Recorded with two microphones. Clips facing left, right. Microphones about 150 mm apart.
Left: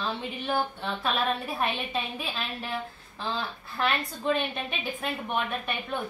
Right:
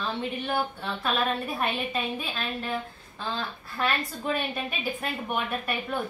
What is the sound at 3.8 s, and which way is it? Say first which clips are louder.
A woman's voice: even; 5° right (ahead or behind).